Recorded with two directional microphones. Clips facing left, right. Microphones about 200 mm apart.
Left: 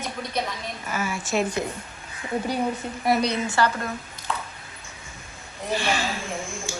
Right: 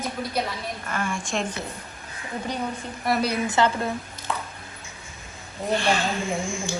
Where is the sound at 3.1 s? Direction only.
5° right (ahead or behind).